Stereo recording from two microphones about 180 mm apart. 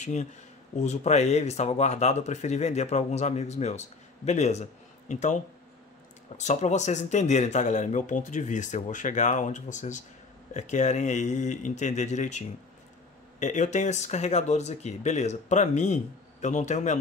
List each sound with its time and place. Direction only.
0.0 s speech: 40° left (ahead or behind)